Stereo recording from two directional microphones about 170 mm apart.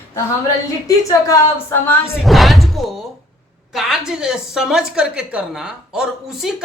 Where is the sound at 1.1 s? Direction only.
20° left (ahead or behind).